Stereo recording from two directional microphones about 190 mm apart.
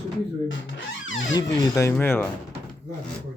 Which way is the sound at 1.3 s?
15° left (ahead or behind).